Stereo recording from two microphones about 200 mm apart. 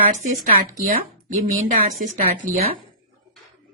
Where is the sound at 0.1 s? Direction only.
40° right (ahead or behind).